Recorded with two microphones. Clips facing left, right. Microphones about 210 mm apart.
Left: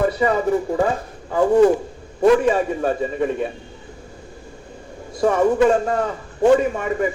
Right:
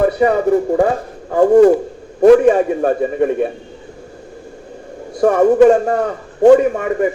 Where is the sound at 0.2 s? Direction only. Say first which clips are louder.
Right 5 dB; 60° right (ahead or behind).